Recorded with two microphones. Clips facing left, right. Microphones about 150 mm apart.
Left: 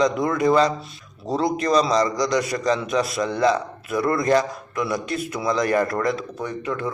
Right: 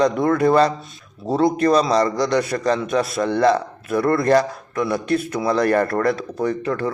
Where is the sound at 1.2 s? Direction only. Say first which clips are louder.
Right 3 dB; 20° left (ahead or behind).